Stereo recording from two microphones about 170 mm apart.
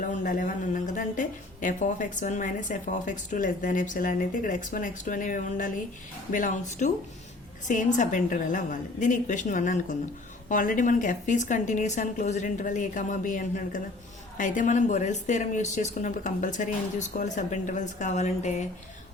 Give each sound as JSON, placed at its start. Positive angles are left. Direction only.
{"t": 0.0, "sound": "a woman's voice", "side_deg": 50}